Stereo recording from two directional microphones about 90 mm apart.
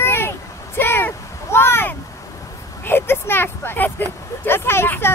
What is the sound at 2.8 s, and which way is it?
Speech, 25° left (ahead or behind).